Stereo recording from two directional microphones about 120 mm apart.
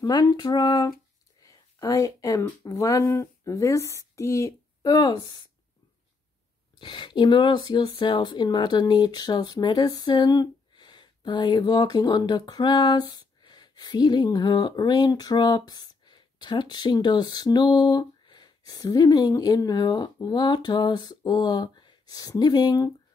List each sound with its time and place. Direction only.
0.0 s speech: 35° left (ahead or behind)
6.8 s speech: 40° left (ahead or behind)